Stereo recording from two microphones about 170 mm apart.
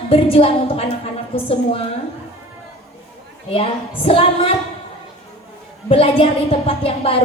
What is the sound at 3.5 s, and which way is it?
A woman's voice, 35° left (ahead or behind).